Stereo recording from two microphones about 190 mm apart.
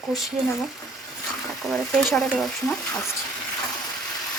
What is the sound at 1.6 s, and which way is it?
Speech, centre (ahead or behind).